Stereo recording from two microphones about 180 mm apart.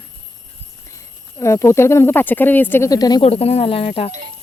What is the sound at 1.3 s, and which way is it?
Speech, 15° left (ahead or behind).